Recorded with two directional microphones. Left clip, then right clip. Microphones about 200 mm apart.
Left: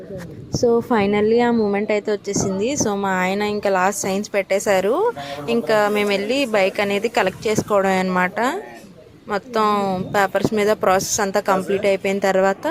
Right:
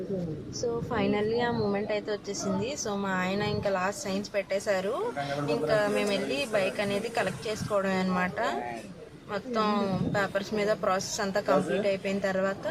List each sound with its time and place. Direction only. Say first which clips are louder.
0.9 s a woman's voice: left 11 dB; 45° left (ahead or behind)